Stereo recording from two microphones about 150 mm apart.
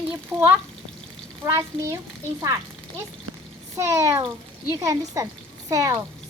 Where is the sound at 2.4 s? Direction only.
25° right (ahead or behind).